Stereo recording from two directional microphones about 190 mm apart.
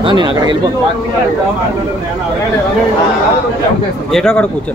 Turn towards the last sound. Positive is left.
turn(degrees=5)  # may be behind; listen again after turning